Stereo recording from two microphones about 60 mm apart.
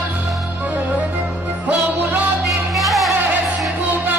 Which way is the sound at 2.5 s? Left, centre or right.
Centre.